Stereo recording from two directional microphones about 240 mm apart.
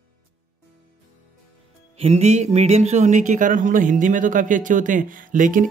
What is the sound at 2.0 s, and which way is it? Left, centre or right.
Speech, right.